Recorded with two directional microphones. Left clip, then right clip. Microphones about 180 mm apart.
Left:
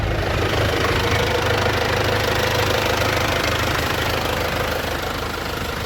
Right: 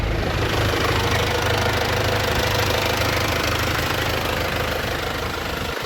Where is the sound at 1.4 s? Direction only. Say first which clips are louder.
Left 1 dB; 45° right (ahead or behind).